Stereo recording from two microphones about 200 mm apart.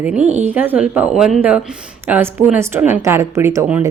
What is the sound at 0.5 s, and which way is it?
A woman's voice, 10° right (ahead or behind).